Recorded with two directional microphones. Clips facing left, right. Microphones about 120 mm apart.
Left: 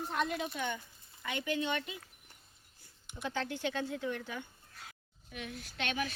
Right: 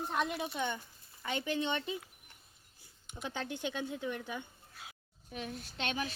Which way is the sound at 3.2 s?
15° right (ahead or behind).